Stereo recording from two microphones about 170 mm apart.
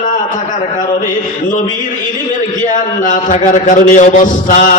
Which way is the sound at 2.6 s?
50° left (ahead or behind).